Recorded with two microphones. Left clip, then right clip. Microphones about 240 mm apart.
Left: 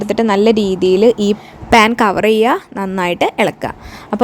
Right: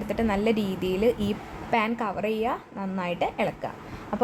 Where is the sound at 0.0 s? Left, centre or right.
Left.